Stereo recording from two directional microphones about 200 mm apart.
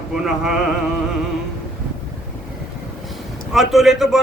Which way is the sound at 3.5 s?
Centre (ahead or behind).